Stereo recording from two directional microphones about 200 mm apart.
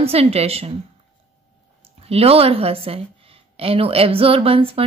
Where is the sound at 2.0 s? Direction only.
30° right (ahead or behind).